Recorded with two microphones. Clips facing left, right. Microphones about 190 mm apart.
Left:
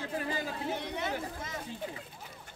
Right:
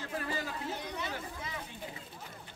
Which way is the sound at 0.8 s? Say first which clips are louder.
Left 4 dB; 55° left (ahead or behind).